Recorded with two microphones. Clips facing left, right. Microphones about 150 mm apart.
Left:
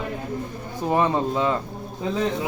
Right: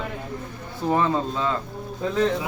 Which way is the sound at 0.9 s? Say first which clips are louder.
Left 2 dB; 20° left (ahead or behind).